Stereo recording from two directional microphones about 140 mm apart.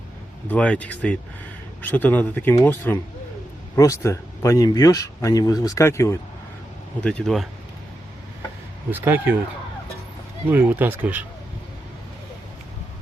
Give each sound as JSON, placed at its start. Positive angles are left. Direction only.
{"t": 0.4, "sound": "speech", "side_deg": 10}
{"t": 7.0, "sound": "speech", "side_deg": 5}
{"t": 8.9, "sound": "speech", "side_deg": -15}
{"t": 10.5, "sound": "speech", "side_deg": -15}